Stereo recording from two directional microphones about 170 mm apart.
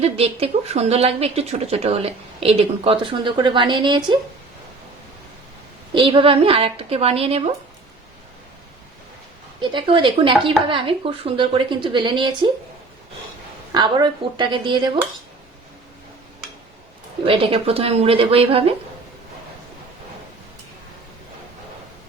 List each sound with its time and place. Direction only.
0.0 s a woman's voice: 35° right (ahead or behind)
5.9 s a woman's voice: 30° right (ahead or behind)
9.6 s a woman's voice: 30° right (ahead or behind)
13.7 s a woman's voice: 25° right (ahead or behind)
17.2 s a woman's voice: 35° right (ahead or behind)